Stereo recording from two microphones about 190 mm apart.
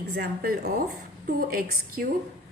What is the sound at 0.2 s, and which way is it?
A woman's voice, 55° right (ahead or behind).